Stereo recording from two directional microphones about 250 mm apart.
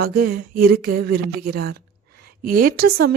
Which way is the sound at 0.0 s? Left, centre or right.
Right.